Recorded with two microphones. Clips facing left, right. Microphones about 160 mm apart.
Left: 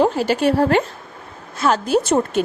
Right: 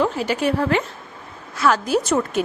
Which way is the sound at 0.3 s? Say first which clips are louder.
Left 4 dB; 30° left (ahead or behind).